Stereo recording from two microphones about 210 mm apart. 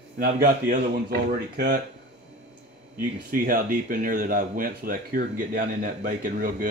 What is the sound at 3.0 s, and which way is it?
Speech, 45° right (ahead or behind).